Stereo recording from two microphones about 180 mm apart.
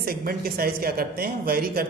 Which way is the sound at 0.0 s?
55° right (ahead or behind).